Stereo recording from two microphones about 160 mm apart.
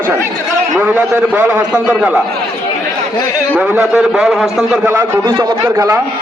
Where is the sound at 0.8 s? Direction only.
10° right (ahead or behind).